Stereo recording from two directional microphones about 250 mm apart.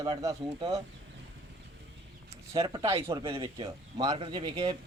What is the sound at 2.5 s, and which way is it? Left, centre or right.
Speech, centre.